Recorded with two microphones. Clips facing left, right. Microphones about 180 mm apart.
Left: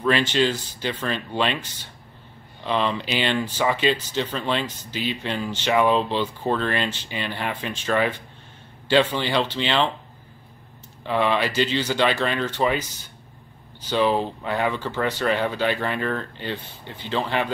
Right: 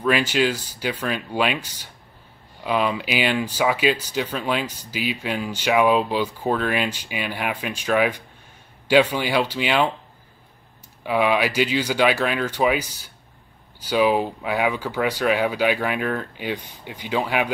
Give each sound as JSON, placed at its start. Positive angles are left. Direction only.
{"t": 0.0, "sound": "speech", "side_deg": -10}
{"t": 11.1, "sound": "speech", "side_deg": -10}